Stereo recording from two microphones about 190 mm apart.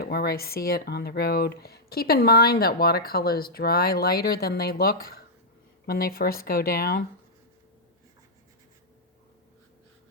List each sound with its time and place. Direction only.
0.0 s speech: 55° left (ahead or behind)